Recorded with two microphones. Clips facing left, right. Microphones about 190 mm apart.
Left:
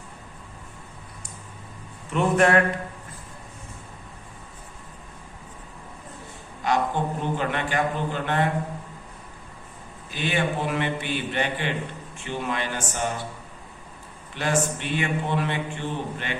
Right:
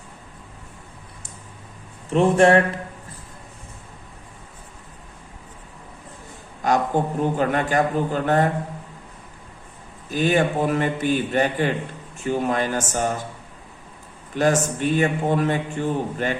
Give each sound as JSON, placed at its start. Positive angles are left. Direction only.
{"t": 2.0, "sound": "a man's voice", "side_deg": -30}
{"t": 6.6, "sound": "a man's voice", "side_deg": -45}
{"t": 10.1, "sound": "a man's voice", "side_deg": -45}
{"t": 14.3, "sound": "a man's voice", "side_deg": -45}